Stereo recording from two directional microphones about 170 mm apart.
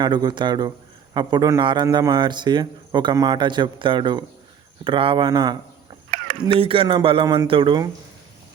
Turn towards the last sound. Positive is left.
turn(degrees=-30)  # may be behind; listen again after turning